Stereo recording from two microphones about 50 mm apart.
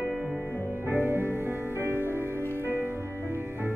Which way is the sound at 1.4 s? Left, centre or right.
Right.